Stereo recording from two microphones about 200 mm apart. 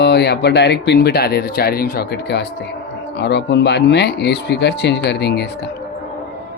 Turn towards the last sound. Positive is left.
turn(degrees=55)  # may be behind; listen again after turning